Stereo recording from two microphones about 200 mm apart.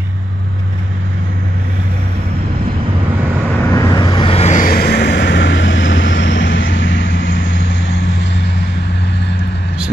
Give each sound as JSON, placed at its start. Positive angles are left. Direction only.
{"t": 3.7, "sound": "vehicle", "side_deg": 20}